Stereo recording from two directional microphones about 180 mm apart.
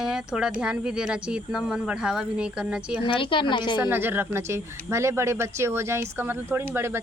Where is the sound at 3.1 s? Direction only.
30° left (ahead or behind).